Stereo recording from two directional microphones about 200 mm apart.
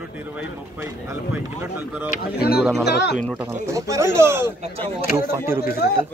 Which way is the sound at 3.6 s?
15° right (ahead or behind).